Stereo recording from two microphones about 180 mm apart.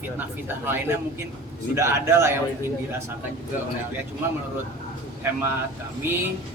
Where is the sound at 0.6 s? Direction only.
10° right (ahead or behind).